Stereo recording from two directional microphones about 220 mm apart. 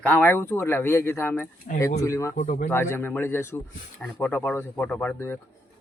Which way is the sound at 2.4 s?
40° left (ahead or behind).